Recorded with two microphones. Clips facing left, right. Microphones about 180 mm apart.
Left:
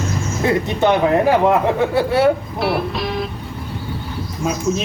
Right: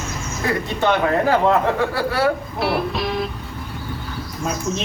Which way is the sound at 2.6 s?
Centre (ahead or behind).